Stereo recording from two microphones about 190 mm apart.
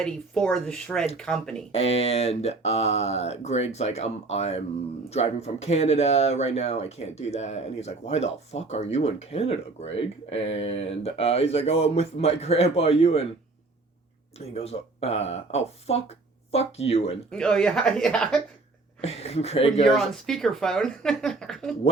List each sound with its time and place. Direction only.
0.0 s speech: 5° left (ahead or behind)
1.7 s speech: 35° left (ahead or behind)
14.3 s speech: 35° left (ahead or behind)
17.3 s speech: 5° left (ahead or behind)
19.0 s speech: 30° left (ahead or behind)
19.9 s speech: centre (ahead or behind)